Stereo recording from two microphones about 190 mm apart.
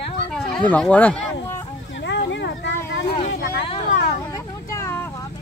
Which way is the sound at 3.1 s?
35° left (ahead or behind).